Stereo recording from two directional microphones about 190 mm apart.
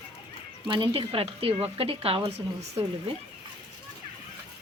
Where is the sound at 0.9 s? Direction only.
30° right (ahead or behind).